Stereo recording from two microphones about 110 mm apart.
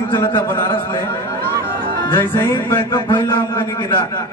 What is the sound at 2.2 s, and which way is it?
A man's voice, 25° left (ahead or behind).